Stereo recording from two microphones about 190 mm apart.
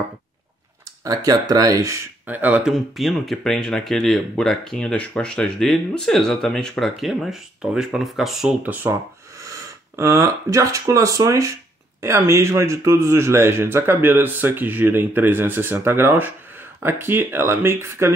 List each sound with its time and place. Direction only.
1.0 s a man's voice: 20° right (ahead or behind)